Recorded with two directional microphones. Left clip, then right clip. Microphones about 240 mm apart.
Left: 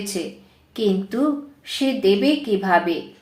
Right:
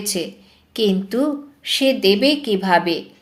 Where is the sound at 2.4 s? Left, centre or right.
Right.